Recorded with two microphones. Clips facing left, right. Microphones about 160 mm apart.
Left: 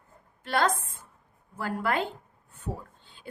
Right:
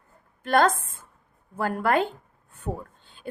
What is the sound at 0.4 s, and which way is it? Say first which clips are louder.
A woman's voice: right 5 dB; 50° right (ahead or behind).